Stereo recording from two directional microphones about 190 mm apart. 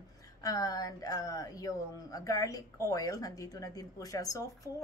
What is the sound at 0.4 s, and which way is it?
A woman's voice, 20° left (ahead or behind).